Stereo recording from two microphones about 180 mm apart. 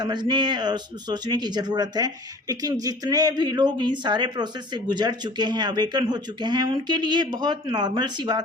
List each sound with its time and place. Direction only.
0.0 s speech: 25° right (ahead or behind)